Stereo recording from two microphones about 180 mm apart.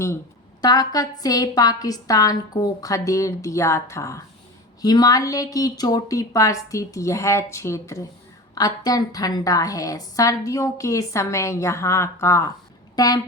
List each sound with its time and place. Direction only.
0.6 s a woman's voice: 20° left (ahead or behind)